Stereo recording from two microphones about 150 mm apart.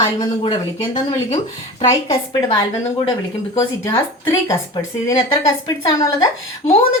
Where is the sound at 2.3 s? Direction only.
25° left (ahead or behind).